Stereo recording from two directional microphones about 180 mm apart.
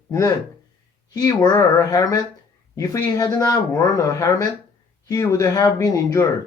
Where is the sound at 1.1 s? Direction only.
20° left (ahead or behind).